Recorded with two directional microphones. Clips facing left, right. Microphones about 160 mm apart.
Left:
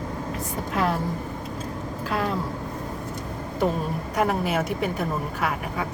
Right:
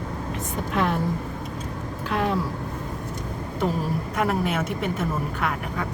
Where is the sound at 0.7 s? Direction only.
40° left (ahead or behind).